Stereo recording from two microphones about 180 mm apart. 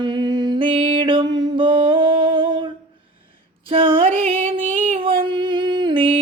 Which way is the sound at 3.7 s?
30° right (ahead or behind).